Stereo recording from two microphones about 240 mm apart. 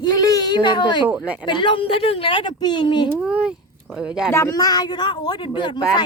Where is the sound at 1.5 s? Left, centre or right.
Left.